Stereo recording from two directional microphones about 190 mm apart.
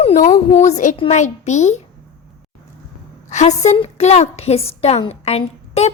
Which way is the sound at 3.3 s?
40° left (ahead or behind).